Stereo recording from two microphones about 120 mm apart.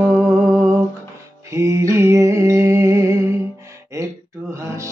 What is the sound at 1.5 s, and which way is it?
Music, 25° right (ahead or behind).